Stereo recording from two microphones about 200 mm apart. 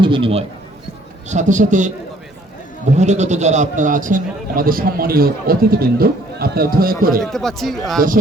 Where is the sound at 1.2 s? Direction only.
40° right (ahead or behind).